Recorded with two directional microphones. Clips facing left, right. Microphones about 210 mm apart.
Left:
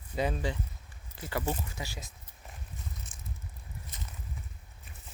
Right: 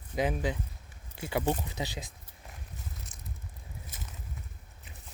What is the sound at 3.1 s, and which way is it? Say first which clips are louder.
Bicycle: even; 60° right (ahead or behind).